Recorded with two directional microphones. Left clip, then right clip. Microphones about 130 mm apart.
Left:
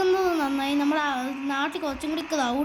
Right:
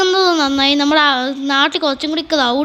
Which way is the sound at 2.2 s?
20° right (ahead or behind).